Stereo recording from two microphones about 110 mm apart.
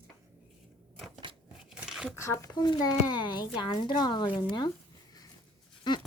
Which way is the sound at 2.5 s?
40° left (ahead or behind).